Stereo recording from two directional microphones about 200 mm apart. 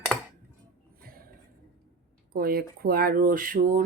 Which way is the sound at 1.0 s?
45° right (ahead or behind).